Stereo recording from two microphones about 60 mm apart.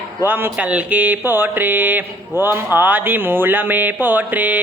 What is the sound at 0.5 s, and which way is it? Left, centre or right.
Speech, right.